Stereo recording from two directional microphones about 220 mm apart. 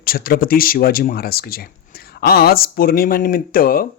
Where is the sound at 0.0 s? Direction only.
40° left (ahead or behind).